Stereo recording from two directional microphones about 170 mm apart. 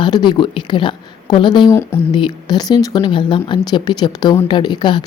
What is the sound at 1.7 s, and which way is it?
Speech, 15° left (ahead or behind).